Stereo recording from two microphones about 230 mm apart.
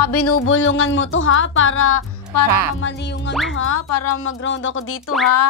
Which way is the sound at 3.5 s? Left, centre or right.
Left.